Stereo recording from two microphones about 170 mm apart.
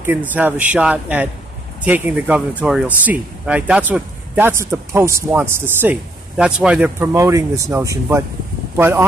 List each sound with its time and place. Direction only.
0.0 s speech: 10° right (ahead or behind)